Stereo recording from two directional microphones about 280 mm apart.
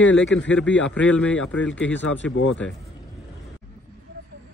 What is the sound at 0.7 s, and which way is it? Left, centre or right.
Speech, left.